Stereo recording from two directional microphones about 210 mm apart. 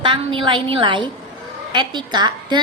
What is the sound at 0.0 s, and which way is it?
A woman's voice, 25° right (ahead or behind).